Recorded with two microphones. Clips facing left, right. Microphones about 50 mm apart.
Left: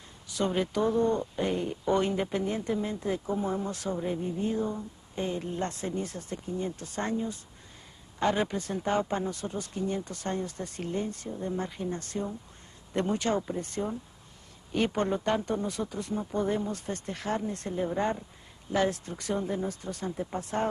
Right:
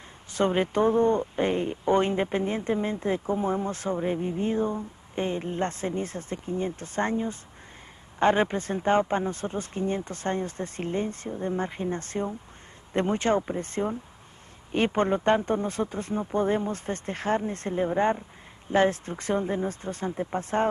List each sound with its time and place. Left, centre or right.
0.3 s speech: right
20.3 s speech: right